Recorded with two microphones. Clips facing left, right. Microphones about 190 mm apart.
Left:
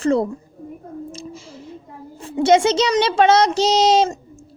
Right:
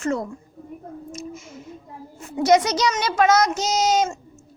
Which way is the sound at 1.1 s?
30° left (ahead or behind).